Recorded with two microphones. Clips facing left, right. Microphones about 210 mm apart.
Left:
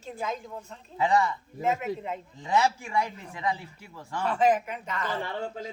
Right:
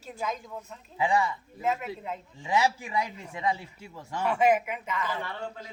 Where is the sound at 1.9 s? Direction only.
45° left (ahead or behind).